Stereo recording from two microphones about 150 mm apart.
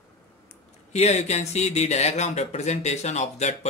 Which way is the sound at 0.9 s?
45° left (ahead or behind).